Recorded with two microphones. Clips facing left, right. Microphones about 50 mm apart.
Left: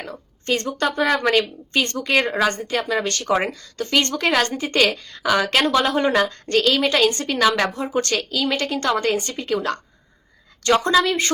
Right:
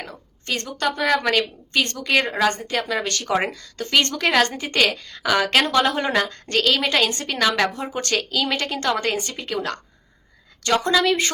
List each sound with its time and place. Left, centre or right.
0.0 s a woman's voice: centre
7.3 s a woman's voice: centre
11.0 s a woman's voice: centre